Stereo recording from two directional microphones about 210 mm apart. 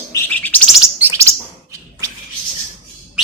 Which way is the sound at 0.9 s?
10° right (ahead or behind).